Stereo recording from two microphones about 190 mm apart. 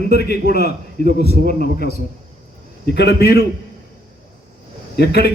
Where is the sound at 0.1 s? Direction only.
55° left (ahead or behind).